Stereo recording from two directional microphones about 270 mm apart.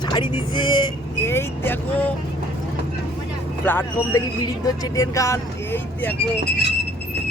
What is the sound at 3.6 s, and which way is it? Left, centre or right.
Speech, centre.